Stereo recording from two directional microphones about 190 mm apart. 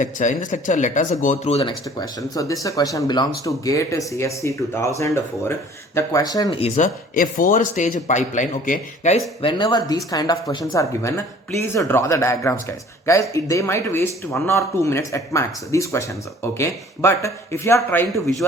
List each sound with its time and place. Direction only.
0.0 s speech: 40° left (ahead or behind)
2.0 s speech: 20° left (ahead or behind)
6.6 s speech: 40° left (ahead or behind)
9.4 s speech: 25° left (ahead or behind)